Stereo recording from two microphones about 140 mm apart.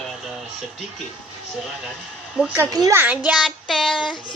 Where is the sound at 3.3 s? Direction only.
Centre (ahead or behind).